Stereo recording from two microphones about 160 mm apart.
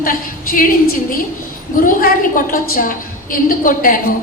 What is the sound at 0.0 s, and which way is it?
Speech, 60° left (ahead or behind).